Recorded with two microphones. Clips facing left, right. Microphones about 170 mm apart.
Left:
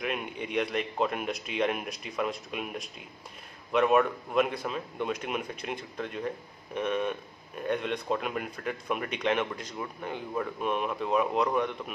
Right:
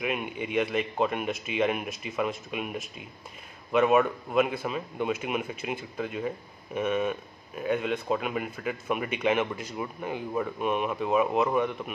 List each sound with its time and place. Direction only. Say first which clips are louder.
0.0 s speech: right 2 dB; 5° right (ahead or behind)